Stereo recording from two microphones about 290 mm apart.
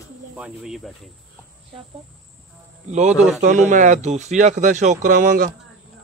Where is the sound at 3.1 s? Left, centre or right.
Centre.